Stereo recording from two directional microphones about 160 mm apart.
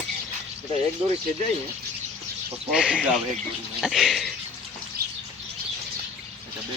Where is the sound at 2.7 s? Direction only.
5° right (ahead or behind).